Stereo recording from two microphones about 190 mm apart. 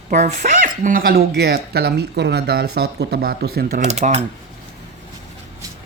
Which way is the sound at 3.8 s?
35° right (ahead or behind).